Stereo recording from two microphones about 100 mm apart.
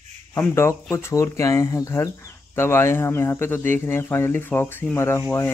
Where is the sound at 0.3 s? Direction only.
25° left (ahead or behind).